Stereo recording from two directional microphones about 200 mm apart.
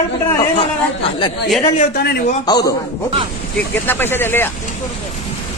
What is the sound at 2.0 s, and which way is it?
Speech, 55° left (ahead or behind).